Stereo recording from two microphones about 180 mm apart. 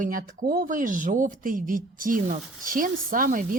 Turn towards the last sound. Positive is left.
turn(degrees=-50)  # may be behind; listen again after turning